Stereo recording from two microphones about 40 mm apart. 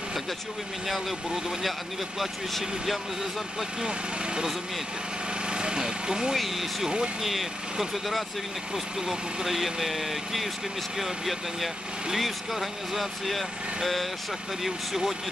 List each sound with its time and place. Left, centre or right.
0.8 s speech: centre
2.1 s speech: centre
3.8 s speech: centre
5.5 s a sound: right
6.3 s speech: centre
9.5 s speech: centre
14.6 s speech: centre